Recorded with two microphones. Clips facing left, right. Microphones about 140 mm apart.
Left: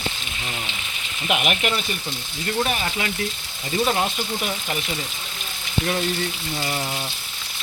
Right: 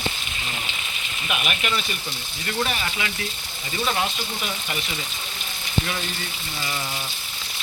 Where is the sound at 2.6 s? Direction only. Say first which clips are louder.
Left 2 dB; 35° left (ahead or behind).